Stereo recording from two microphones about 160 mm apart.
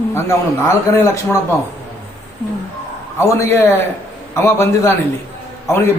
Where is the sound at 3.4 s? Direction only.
15° left (ahead or behind).